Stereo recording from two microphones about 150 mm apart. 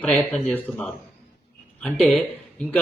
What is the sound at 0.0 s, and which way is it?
A man's voice, 5° left (ahead or behind).